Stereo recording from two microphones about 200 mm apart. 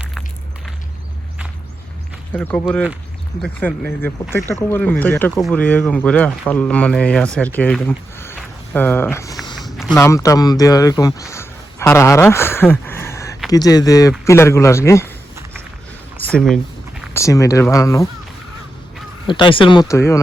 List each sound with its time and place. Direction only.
2.3 s speech: 5° left (ahead or behind)
9.6 s a sound: centre (ahead or behind)
10.0 s speech: 15° left (ahead or behind)
12.8 s a sound: 10° left (ahead or behind)
13.5 s speech: 20° left (ahead or behind)
16.2 s speech: 5° left (ahead or behind)
17.2 s speech: 15° left (ahead or behind)
19.3 s speech: 25° left (ahead or behind)